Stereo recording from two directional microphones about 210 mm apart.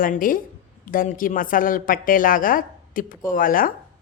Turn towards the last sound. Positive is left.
turn(degrees=40)  # may be behind; listen again after turning